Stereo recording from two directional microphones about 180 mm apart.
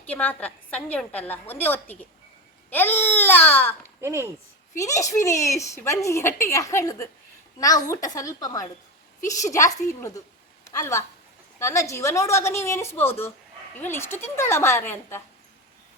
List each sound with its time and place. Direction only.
0.0 s a woman's voice: 10° left (ahead or behind)
4.0 s speech: 15° right (ahead or behind)
4.8 s a woman's voice: 15° left (ahead or behind)
10.0 s a sound: 15° left (ahead or behind)
11.6 s a woman's voice: 15° left (ahead or behind)